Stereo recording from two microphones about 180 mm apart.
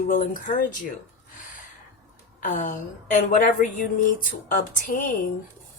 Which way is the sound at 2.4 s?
45° left (ahead or behind).